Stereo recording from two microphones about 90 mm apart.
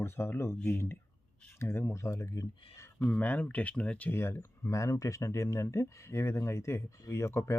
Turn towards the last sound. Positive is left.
turn(degrees=30)  # may be behind; listen again after turning